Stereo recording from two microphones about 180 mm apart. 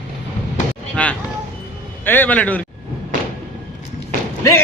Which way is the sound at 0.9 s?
5° left (ahead or behind).